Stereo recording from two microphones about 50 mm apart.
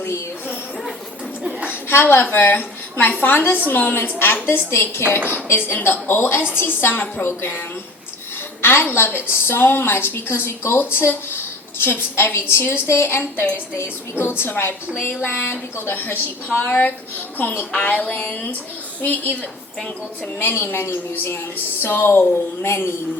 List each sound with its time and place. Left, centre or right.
1.9 s a woman's voice: left
4.4 s a woman's voice: left
8.6 s a woman's voice: left
16.6 s speech: left
17.7 s a sound: left
20.4 s a woman's voice: left
20.8 s a woman's voice: left
21.8 s a woman's voice: left